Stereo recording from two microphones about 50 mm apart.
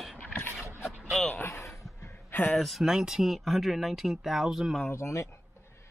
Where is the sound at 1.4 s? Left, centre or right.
Left.